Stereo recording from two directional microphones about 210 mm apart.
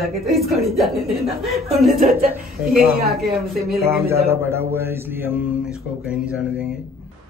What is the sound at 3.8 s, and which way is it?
Mantra, 15° right (ahead or behind).